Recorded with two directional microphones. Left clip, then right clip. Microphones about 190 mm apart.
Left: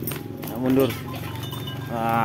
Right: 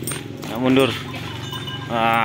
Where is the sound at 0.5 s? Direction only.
15° right (ahead or behind).